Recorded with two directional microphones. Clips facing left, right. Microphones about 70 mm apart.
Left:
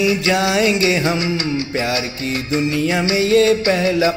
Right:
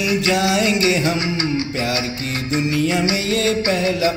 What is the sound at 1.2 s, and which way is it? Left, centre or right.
Music, right.